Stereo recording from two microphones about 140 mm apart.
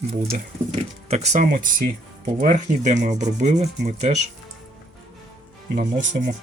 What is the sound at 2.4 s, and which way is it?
Rub, 65° right (ahead or behind).